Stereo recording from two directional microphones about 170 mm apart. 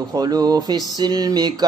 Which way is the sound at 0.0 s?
20° right (ahead or behind).